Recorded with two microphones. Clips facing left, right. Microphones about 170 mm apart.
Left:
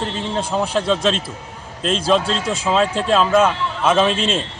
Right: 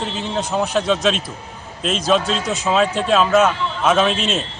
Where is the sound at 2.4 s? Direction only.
30° left (ahead or behind).